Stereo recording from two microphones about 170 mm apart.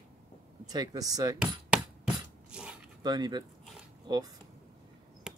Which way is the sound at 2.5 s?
5° right (ahead or behind).